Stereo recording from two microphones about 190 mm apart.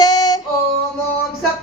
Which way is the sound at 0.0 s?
20° left (ahead or behind).